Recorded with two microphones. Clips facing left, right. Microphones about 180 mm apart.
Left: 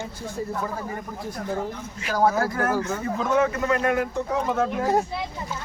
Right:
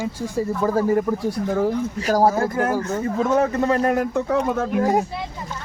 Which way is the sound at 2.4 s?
20° right (ahead or behind).